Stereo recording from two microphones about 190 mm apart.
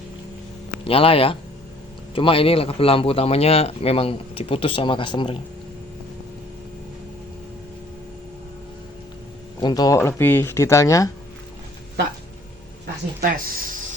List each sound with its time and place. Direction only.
0.9 s speech: 30° left (ahead or behind)
9.6 s speech: 20° left (ahead or behind)
13.2 s a sound: 45° right (ahead or behind)